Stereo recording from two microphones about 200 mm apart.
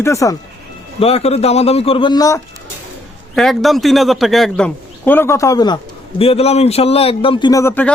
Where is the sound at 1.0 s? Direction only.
30° left (ahead or behind).